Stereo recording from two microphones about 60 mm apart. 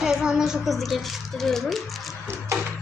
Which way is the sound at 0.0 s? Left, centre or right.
Centre.